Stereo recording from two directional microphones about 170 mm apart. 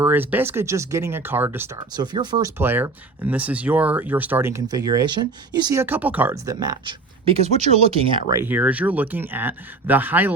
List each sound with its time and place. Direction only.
0.0 s speech: 10° right (ahead or behind)
2.6 s speech: 10° right (ahead or behind)
5.8 s speech: 10° right (ahead or behind)
7.3 s speech: 40° right (ahead or behind)
8.3 s speech: 15° right (ahead or behind)